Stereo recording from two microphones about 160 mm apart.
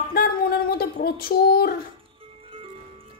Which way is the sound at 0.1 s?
70° left (ahead or behind).